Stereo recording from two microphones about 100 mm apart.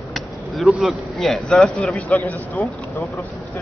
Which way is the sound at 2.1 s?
20° left (ahead or behind).